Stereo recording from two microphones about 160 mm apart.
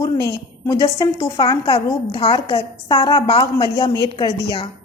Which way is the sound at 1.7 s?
35° left (ahead or behind).